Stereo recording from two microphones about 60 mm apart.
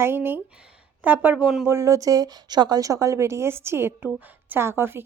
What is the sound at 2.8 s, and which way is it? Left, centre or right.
A woman's voice, right.